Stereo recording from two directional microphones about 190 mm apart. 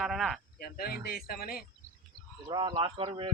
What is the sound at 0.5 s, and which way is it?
Speech, 50° left (ahead or behind).